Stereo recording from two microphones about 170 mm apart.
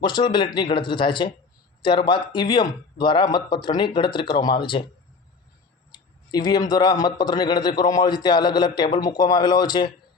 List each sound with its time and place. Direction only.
0.0 s a man's voice: 25° left (ahead or behind)
6.3 s a man's voice: 25° left (ahead or behind)